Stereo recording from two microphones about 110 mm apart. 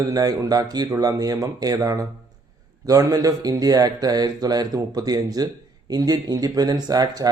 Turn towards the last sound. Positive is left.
turn(degrees=-35)  # may be behind; listen again after turning